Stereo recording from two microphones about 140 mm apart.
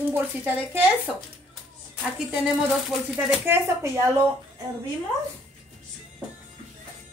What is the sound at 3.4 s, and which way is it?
Speech, 15° right (ahead or behind).